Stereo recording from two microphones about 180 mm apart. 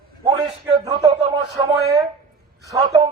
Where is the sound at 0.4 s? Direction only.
25° right (ahead or behind).